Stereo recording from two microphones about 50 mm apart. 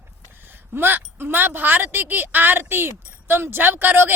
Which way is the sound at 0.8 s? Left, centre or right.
Right.